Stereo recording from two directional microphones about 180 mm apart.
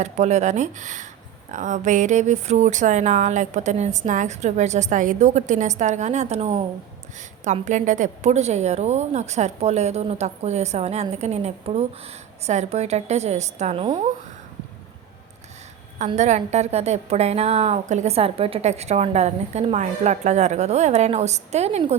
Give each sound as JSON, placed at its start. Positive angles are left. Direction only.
{"t": 0.0, "sound": "a woman's voice", "side_deg": -40}
{"t": 16.1, "sound": "a woman's voice", "side_deg": -40}